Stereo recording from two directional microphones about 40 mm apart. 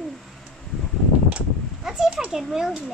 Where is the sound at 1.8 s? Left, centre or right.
Centre.